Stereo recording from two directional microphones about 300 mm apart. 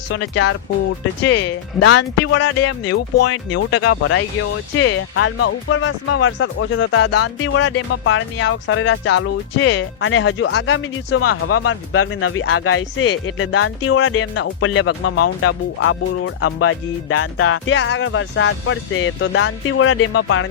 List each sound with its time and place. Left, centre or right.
1.2 s speech: left